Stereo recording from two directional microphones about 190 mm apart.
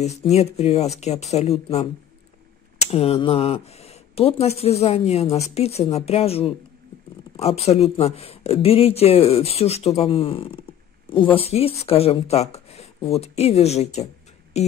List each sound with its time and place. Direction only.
0.0 s speech: 35° left (ahead or behind)
2.9 s speech: 30° left (ahead or behind)